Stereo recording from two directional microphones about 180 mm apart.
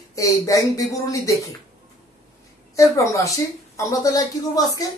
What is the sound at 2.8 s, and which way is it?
Speech, 15° left (ahead or behind).